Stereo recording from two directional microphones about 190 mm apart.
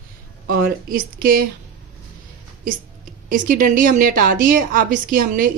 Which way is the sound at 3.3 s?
45° right (ahead or behind).